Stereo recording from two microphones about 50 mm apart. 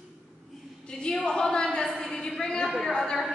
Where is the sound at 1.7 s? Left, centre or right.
Centre.